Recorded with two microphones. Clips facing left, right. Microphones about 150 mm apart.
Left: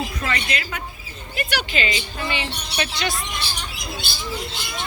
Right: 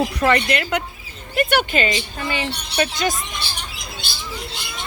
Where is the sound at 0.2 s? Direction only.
60° right (ahead or behind).